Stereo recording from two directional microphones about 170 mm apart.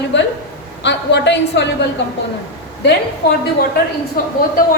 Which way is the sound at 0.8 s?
90° left.